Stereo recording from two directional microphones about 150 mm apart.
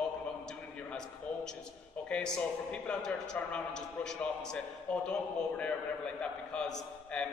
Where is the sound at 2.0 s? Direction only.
5° left (ahead or behind).